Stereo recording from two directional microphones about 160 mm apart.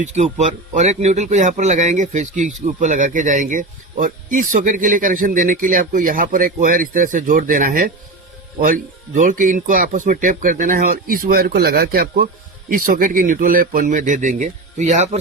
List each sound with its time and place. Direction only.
0.0 s speech: 45° right (ahead or behind); by 12.3 s 70° right (ahead or behind)
12.7 s speech: 60° right (ahead or behind)